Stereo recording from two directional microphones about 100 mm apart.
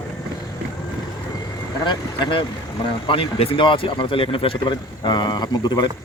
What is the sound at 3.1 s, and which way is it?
Speech, 70° left (ahead or behind).